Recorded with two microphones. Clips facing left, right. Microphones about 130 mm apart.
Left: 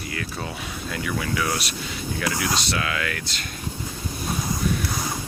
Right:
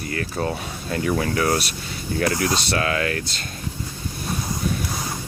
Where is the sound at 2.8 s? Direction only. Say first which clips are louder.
Right 5 dB; 35° right (ahead or behind).